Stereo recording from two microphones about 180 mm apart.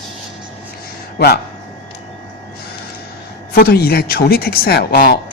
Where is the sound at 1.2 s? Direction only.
60° left (ahead or behind).